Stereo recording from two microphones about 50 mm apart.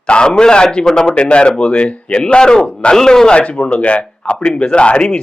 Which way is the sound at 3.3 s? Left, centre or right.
Left.